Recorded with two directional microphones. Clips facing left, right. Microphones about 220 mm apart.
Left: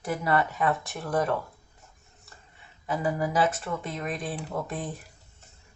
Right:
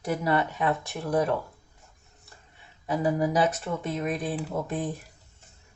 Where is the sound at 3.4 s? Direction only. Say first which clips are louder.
Right 1 dB; 20° right (ahead or behind).